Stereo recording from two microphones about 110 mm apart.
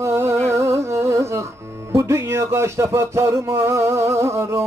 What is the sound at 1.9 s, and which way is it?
Music, 25° right (ahead or behind).